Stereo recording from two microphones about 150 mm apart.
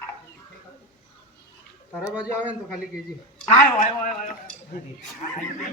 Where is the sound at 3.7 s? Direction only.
60° left (ahead or behind).